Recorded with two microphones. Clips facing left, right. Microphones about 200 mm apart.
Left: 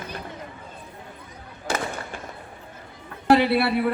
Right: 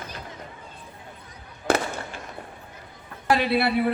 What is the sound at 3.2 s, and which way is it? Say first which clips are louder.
Speech: left 5 dB; 60° left (ahead or behind).